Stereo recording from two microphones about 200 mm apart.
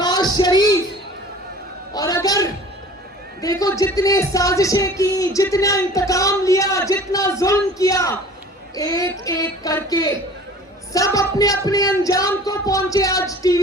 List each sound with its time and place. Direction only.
0.0 s music: 20° left (ahead or behind)
1.9 s a sound: 20° left (ahead or behind)
3.4 s speech: 20° left (ahead or behind)